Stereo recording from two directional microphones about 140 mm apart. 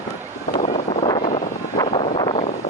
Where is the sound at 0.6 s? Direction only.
50° left (ahead or behind).